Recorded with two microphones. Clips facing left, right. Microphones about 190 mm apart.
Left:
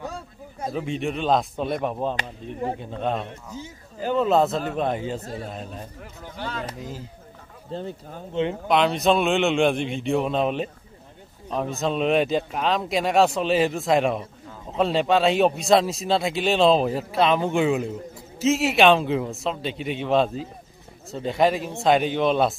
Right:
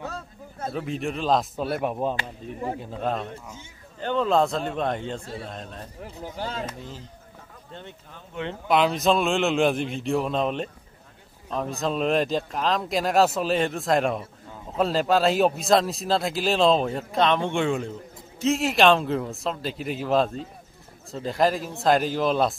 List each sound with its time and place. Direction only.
0.0 s a sound: 15° left (ahead or behind)
0.7 s speech: centre (ahead or behind)
5.2 s speech: 40° left (ahead or behind)
5.5 s speech: 5° left (ahead or behind)
6.3 s speech: 40° right (ahead or behind)
7.7 s speech: 40° left (ahead or behind)
8.6 s speech: centre (ahead or behind)